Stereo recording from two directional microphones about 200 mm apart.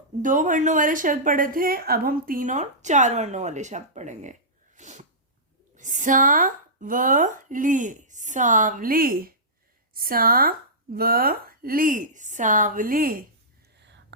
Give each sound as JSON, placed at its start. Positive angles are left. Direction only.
{"t": 0.2, "sound": "a woman's voice", "side_deg": -40}
{"t": 4.8, "sound": "sneeze", "side_deg": -35}
{"t": 5.7, "sound": "a woman's voice", "side_deg": -40}